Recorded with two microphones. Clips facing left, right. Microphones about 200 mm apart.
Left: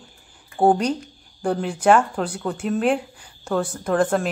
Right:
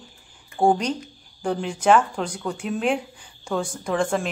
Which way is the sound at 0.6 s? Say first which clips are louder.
Left 2 dB; 5° left (ahead or behind).